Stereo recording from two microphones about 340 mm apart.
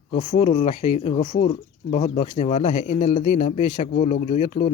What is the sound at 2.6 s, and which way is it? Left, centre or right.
Speech, left.